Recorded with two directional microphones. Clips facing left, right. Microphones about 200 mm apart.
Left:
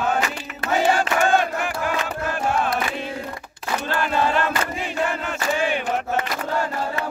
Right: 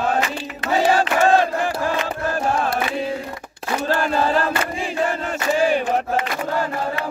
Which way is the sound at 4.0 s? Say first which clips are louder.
Left 1 dB; 35° right (ahead or behind).